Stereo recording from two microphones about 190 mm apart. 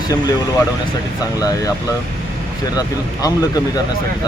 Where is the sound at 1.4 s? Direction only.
20° left (ahead or behind).